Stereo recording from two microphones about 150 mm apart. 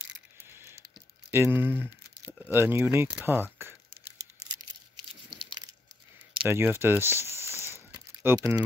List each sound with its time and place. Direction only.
0.5 s a sound: 15° right (ahead or behind)
1.3 s speech: 15° right (ahead or behind)
6.4 s speech: 15° right (ahead or behind)